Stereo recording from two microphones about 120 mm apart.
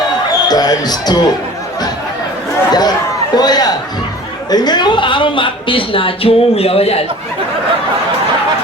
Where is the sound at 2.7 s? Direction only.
35° left (ahead or behind).